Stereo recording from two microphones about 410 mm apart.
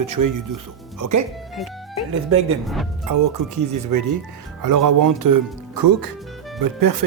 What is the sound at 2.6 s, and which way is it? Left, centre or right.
Speech, centre.